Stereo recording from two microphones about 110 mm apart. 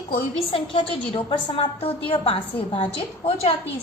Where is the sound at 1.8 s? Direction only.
60° left (ahead or behind).